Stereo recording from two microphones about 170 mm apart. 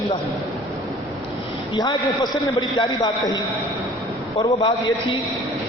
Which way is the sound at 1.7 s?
25° left (ahead or behind).